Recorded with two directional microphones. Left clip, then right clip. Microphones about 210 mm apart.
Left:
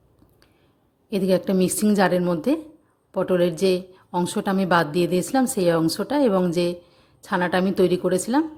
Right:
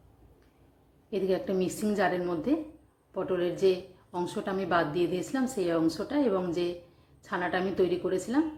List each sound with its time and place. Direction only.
1.1 s a woman's voice: 50° left (ahead or behind)